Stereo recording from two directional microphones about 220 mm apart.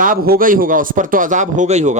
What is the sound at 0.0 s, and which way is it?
A woman's voice, 40° right (ahead or behind).